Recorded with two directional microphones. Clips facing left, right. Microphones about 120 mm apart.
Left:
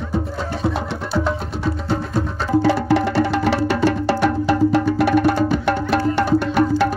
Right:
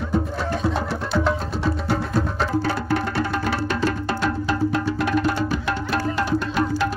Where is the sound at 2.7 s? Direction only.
90° left.